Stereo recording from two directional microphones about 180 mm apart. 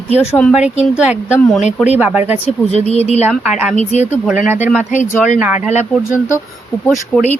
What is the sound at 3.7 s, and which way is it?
Speech, 40° left (ahead or behind).